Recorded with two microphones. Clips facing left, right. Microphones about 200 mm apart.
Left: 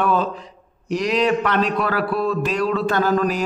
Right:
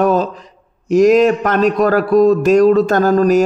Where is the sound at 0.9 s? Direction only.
45° right (ahead or behind).